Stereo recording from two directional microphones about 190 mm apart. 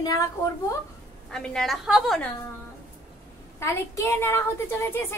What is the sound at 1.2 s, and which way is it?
A woman's voice, 5° left (ahead or behind).